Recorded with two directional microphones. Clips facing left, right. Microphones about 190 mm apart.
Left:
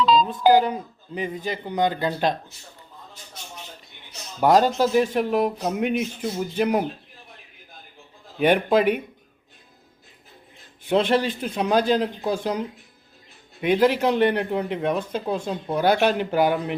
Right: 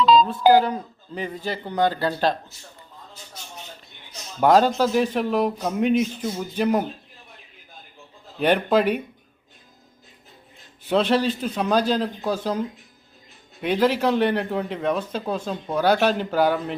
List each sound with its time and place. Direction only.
0.3 s speech: 15° left (ahead or behind)
4.4 s speech: 10° left (ahead or behind)
8.4 s speech: 10° left (ahead or behind)
11.1 s speech: 15° left (ahead or behind)